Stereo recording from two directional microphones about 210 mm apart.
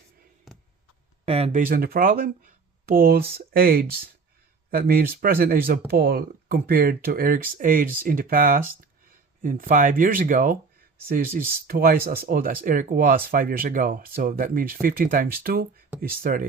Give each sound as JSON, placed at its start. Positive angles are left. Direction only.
{"t": 1.2, "sound": "speech", "side_deg": -30}
{"t": 1.6, "sound": "speech", "side_deg": -45}